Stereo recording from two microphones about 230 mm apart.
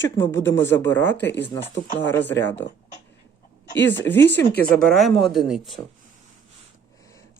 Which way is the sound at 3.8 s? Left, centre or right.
Centre.